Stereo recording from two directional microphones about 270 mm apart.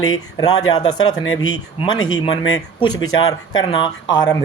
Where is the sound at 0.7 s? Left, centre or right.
Centre.